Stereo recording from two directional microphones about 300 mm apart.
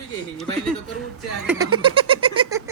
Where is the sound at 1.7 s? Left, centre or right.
Centre.